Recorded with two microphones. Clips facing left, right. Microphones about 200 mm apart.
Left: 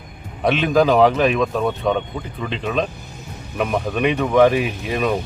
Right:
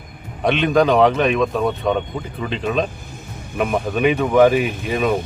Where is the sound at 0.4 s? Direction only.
Centre (ahead or behind).